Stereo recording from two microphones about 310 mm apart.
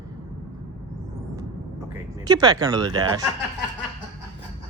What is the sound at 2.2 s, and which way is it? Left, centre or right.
Speech, centre.